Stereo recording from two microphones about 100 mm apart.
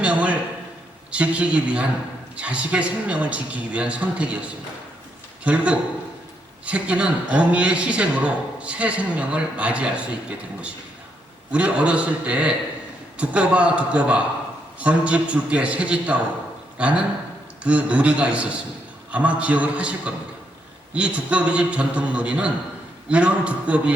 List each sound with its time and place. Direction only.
0.0 s a sound: 15° right (ahead or behind)
1.1 s a man's voice: 10° right (ahead or behind)
5.5 s a man's voice: 10° right (ahead or behind)